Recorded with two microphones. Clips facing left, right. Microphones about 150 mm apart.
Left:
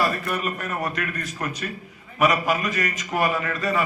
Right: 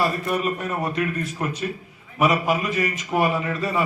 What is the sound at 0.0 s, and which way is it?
A man's voice, 25° right (ahead or behind).